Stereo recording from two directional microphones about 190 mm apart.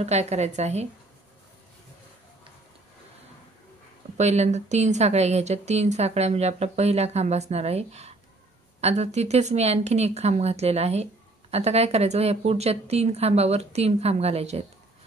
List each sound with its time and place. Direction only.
0.0 s speech: 35° right (ahead or behind)
4.2 s speech: 35° right (ahead or behind)